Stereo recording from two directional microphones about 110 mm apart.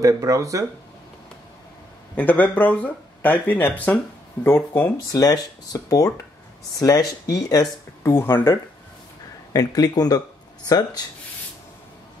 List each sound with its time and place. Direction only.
0.0 s speech: 30° right (ahead or behind)
2.1 s speech: 15° left (ahead or behind)
5.1 s speech: 35° left (ahead or behind)
8.0 s speech: 20° left (ahead or behind)
9.5 s speech: 35° left (ahead or behind)